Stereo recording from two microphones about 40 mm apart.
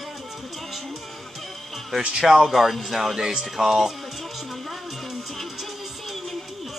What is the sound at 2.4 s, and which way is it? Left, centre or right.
Speech, centre.